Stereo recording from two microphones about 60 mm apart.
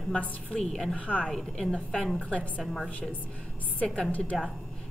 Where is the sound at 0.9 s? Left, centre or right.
Left.